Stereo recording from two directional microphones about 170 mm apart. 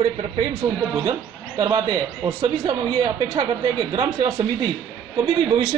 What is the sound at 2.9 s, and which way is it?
A man's voice, 30° right (ahead or behind).